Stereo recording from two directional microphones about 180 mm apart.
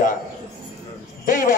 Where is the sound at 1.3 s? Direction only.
50° left (ahead or behind).